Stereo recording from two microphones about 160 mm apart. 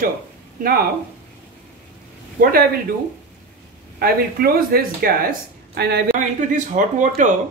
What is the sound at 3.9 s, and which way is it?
Speech, 70° right (ahead or behind).